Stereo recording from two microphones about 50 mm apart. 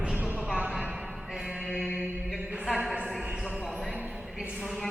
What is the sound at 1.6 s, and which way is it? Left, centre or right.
Mantra, centre.